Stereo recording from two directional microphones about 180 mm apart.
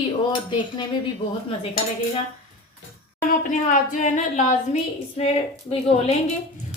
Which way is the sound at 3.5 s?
45° left (ahead or behind).